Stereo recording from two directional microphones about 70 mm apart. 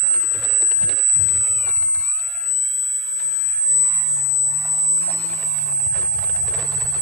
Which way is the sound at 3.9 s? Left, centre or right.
Left.